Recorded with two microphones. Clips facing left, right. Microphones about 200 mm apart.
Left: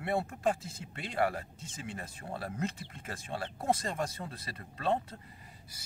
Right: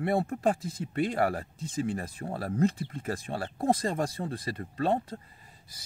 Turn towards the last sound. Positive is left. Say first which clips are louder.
# right 4 dB
turn(degrees=-35)  # may be behind; listen again after turning